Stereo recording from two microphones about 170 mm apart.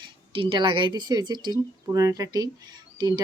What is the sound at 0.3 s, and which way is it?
A woman's voice, 30° right (ahead or behind).